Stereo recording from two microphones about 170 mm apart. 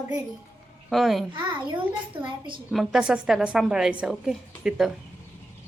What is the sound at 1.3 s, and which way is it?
A child's voice, 30° right (ahead or behind).